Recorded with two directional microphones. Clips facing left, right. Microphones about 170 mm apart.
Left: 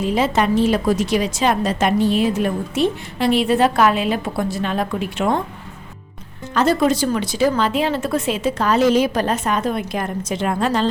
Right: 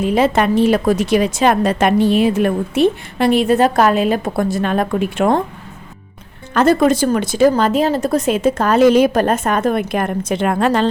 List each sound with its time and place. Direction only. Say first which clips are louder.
0.0 s a woman's voice: right 4 dB; 60° right (ahead or behind)
6.5 s a woman's voice: right 4 dB; 50° right (ahead or behind)